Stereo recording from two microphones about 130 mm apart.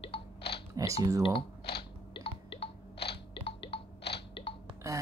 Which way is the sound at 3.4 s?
45° left (ahead or behind).